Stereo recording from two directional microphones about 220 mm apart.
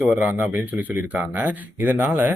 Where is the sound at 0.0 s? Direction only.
5° right (ahead or behind).